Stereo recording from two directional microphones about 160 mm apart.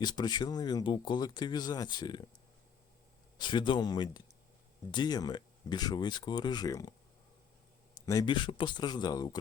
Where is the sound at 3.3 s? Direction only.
30° left (ahead or behind).